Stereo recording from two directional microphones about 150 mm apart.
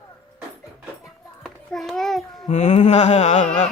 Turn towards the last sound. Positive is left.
turn(degrees=50)  # may be behind; listen again after turning